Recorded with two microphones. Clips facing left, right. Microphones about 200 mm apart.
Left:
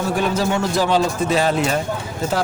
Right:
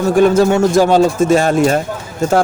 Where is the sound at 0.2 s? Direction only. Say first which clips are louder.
Right 12 dB; 45° right (ahead or behind).